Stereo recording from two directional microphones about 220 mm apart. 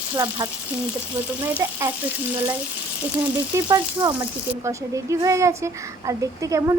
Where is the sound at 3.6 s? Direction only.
20° right (ahead or behind).